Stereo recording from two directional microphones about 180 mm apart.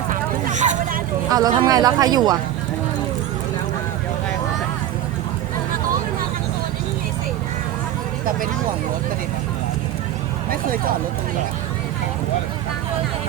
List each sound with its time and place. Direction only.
0.1 s hubbub: 40° right (ahead or behind)
1.3 s speech: 20° right (ahead or behind)
10.5 s speech: 50° right (ahead or behind)